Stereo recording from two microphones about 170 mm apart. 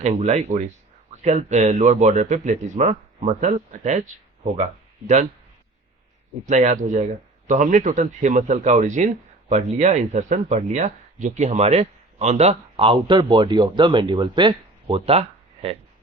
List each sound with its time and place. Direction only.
0.0 s speech: 40° right (ahead or behind)
6.4 s speech: 45° right (ahead or behind)